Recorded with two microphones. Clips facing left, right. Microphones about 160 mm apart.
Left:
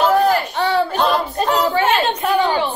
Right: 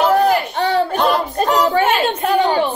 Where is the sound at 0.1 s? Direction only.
40° right (ahead or behind).